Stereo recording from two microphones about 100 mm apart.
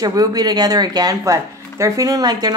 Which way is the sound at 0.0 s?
40° right (ahead or behind).